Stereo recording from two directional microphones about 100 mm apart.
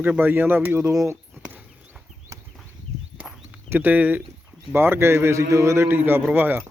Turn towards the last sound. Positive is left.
turn(degrees=-20)  # may be behind; listen again after turning